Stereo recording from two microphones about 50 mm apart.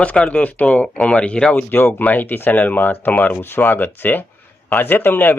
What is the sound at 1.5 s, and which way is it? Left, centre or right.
Speech, left.